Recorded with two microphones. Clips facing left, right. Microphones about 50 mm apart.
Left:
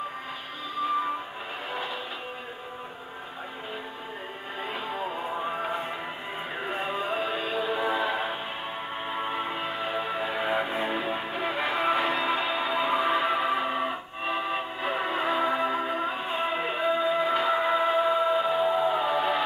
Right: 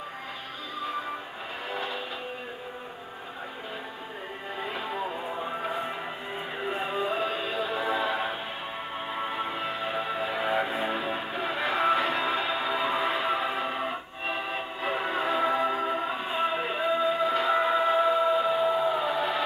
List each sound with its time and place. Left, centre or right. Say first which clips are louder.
5.4 s music: left 2 dB; centre
6.8 s music: right 1 dB; centre